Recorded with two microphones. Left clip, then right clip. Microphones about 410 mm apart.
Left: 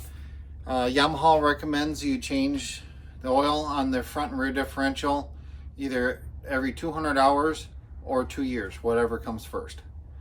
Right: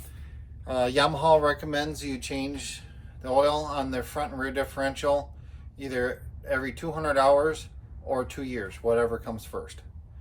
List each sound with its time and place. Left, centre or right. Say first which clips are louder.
0.6 s speech: even; centre